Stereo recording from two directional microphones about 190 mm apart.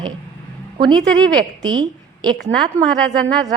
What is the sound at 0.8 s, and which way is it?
A woman's voice, 25° right (ahead or behind).